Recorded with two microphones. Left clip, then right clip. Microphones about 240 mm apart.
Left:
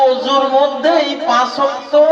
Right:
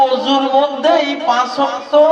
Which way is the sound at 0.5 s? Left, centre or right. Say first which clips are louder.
Right 2 dB; right.